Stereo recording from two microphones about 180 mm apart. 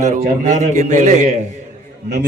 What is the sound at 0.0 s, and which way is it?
A man's voice, 45° right (ahead or behind).